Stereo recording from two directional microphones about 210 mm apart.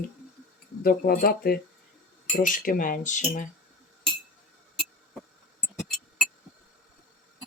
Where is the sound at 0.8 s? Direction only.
45° left (ahead or behind).